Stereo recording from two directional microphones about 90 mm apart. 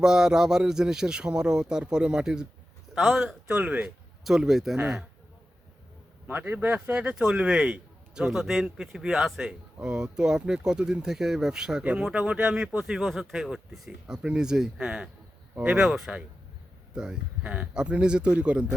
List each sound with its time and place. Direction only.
0.0 s a man's voice: 5° right (ahead or behind)
4.2 s speech: 5° right (ahead or behind)
6.2 s speech: 20° right (ahead or behind)